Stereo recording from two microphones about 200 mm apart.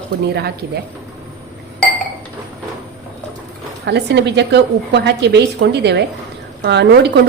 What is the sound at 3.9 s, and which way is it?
A woman's voice, 55° right (ahead or behind).